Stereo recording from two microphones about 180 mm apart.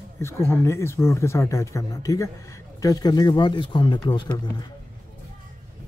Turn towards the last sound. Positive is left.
turn(degrees=25)  # may be behind; listen again after turning